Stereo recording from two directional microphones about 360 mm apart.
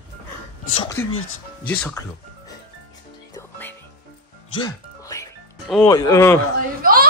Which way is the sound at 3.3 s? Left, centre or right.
Centre.